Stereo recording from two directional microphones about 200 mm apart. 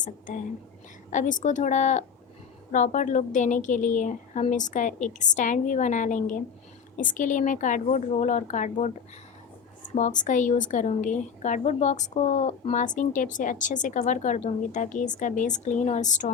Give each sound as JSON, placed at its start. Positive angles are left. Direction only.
{"t": 1.1, "sound": "a woman's voice", "side_deg": 40}
{"t": 9.9, "sound": "a woman's voice", "side_deg": 40}